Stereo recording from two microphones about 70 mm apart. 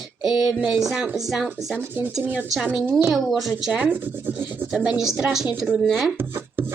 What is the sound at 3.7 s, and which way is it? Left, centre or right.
A woman's voice, right.